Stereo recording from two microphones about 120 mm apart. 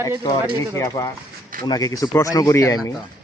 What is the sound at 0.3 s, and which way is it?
Speech, 30° left (ahead or behind).